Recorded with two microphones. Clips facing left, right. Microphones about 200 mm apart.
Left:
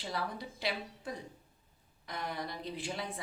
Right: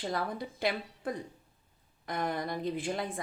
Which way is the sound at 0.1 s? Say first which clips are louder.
Right 4 dB; 50° right (ahead or behind).